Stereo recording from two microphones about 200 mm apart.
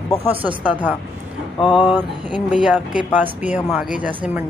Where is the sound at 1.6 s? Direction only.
25° left (ahead or behind).